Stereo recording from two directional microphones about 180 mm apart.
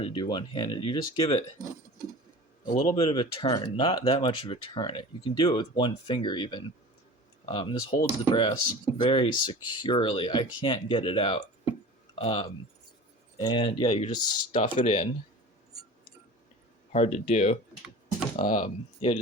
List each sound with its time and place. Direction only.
0.0 s speech: 25° left (ahead or behind)
2.9 s speech: 25° left (ahead or behind)
13.4 s speech: 25° left (ahead or behind)
16.9 s speech: 35° left (ahead or behind)
18.3 s speech: 50° left (ahead or behind)